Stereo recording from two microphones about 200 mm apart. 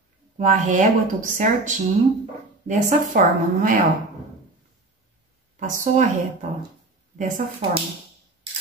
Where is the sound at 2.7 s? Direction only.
40° right (ahead or behind).